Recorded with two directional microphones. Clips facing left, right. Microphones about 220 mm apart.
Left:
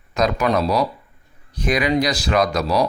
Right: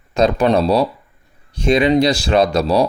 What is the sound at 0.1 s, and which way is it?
Speech, 30° right (ahead or behind).